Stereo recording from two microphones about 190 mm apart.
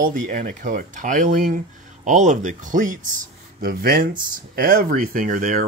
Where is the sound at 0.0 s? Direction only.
45° right (ahead or behind).